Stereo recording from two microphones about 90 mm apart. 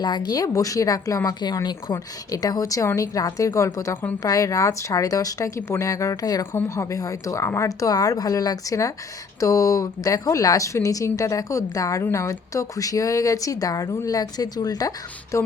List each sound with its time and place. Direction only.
0.0 s speech: 50° left (ahead or behind)
6.4 s speech: 30° left (ahead or behind)